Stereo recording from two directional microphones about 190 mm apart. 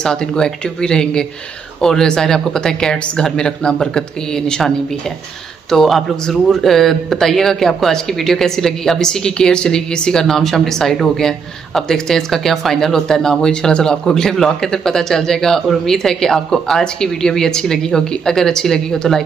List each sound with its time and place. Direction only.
0.0 s speech: 5° left (ahead or behind)